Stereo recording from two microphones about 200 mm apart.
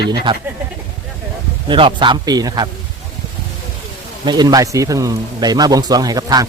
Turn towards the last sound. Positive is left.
turn(degrees=-20)  # may be behind; listen again after turning